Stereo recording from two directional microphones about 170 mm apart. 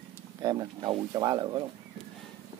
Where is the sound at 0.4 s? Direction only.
25° right (ahead or behind).